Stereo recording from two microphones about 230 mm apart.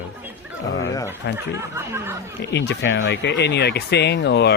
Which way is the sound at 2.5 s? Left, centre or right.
Left.